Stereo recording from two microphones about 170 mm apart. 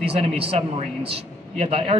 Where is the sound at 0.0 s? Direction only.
35° right (ahead or behind).